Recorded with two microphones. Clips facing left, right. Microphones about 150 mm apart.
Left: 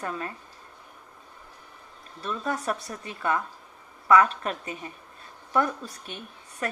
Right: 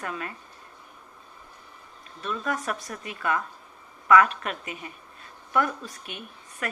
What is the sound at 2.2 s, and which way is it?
A woman's voice, 30° left (ahead or behind).